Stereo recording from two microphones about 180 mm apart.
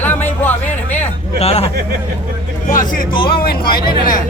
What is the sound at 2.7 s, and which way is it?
Speech, 50° left (ahead or behind).